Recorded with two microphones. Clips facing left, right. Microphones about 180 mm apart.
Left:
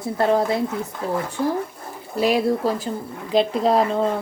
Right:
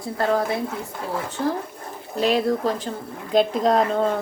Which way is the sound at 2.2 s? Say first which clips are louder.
Left 1 dB; 10° left (ahead or behind).